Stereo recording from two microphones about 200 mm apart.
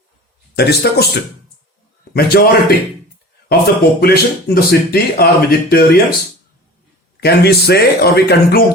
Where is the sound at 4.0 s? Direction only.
50° left (ahead or behind).